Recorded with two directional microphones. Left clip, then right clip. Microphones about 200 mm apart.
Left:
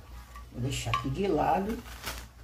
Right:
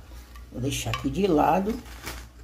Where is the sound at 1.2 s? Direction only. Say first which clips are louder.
Right 6 dB; 50° right (ahead or behind).